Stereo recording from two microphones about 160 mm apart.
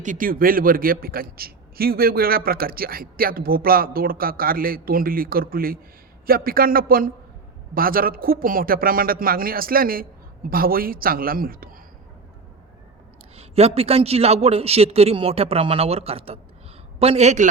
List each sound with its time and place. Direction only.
0.0 s a man's voice: 55° right (ahead or behind)
13.3 s a man's voice: 40° right (ahead or behind)